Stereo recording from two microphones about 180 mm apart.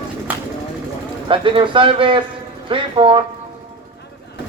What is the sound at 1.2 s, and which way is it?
A man's voice, 30° right (ahead or behind).